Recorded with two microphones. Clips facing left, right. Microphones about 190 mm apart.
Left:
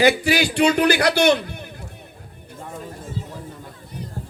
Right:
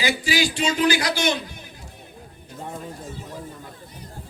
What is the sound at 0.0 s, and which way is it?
A man's voice, 60° left (ahead or behind).